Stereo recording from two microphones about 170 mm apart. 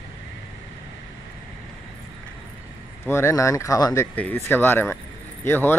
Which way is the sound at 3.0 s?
15° left (ahead or behind).